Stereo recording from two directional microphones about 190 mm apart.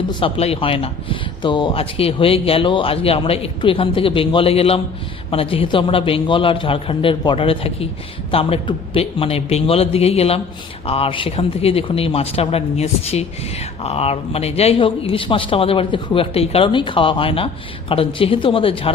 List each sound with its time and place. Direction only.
0.1 s a man's voice: 30° left (ahead or behind)